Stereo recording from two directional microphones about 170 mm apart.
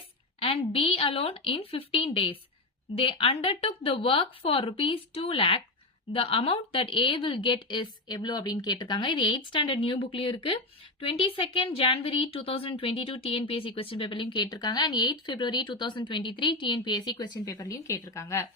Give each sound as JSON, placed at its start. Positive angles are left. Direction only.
{"t": 0.3, "sound": "a woman's voice", "side_deg": 35}